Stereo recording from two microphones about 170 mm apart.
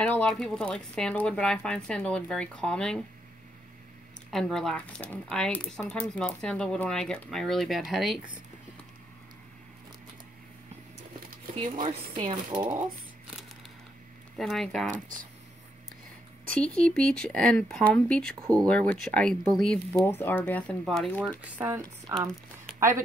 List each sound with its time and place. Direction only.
0.0 s speech: 5° left (ahead or behind)
4.3 s speech: centre (ahead or behind)
11.5 s speech: 50° right (ahead or behind)
12.2 s speech: 30° right (ahead or behind)
14.3 s speech: centre (ahead or behind)
16.8 s speech: 5° left (ahead or behind)
21.4 s speech: 10° right (ahead or behind)